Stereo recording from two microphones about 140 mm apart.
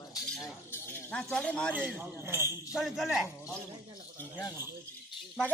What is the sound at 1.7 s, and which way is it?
Speech, 15° right (ahead or behind).